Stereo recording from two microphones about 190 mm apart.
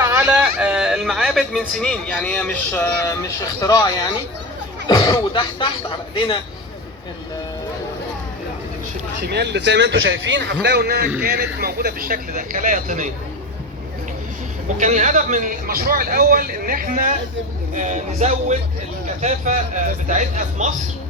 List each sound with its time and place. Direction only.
0.0 s speech: 15° right (ahead or behind); by 3.8 s 15° left (ahead or behind)
4.9 s speech: 20° left (ahead or behind)
9.2 s a man's voice: 60° right (ahead or behind); by 13.1 s 45° right (ahead or behind)
14.8 s a man's voice: 40° right (ahead or behind)